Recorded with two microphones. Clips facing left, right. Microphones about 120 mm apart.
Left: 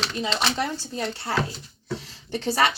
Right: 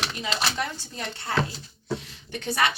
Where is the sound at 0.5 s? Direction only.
30° left (ahead or behind).